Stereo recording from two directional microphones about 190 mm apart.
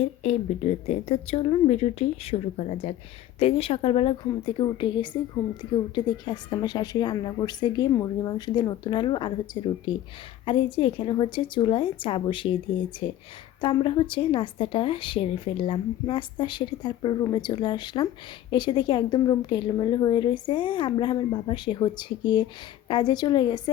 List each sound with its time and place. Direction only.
0.0 s a woman's voice: 35° left (ahead or behind)
13.6 s speech: 25° left (ahead or behind)